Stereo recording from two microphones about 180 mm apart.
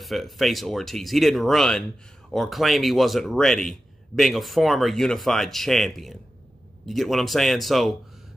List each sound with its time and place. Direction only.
0.0 s a man's voice: centre (ahead or behind)